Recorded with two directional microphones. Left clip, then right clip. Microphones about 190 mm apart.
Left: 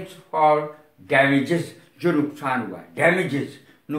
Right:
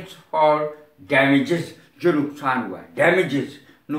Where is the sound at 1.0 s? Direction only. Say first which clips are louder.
Right 1 dB; 15° left (ahead or behind).